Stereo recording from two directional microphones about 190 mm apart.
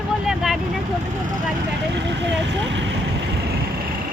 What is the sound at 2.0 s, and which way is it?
Vehicle, 65° right (ahead or behind).